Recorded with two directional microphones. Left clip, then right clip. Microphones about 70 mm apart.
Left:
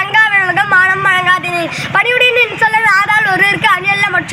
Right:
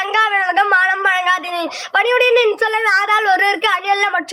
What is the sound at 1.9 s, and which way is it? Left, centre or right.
Speech, right.